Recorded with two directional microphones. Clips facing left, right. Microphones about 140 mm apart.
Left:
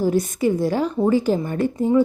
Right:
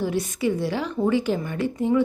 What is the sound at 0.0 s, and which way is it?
A woman's voice, 45° left (ahead or behind).